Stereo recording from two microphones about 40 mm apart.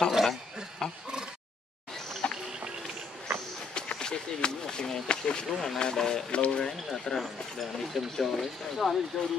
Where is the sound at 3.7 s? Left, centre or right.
Left.